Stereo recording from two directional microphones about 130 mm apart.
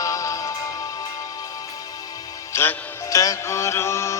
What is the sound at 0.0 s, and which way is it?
Music, 25° left (ahead or behind).